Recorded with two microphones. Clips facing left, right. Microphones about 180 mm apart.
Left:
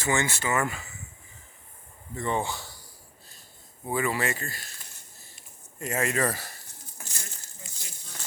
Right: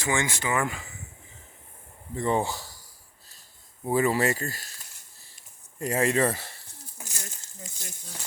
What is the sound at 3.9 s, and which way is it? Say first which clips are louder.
Speech: right 4 dB; 35° right (ahead or behind).